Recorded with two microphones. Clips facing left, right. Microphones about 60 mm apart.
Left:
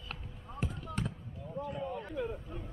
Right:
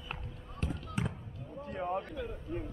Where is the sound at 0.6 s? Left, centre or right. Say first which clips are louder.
Right 1 dB; centre.